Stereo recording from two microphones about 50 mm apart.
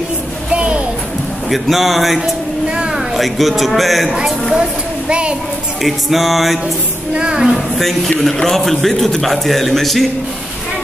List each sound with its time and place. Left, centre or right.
0.5 s music: right
1.5 s a man's voice: centre
4.1 s a woman's voice: centre
5.8 s a man's voice: centre
7.2 s a woman's voice: centre
7.5 s a man's voice: centre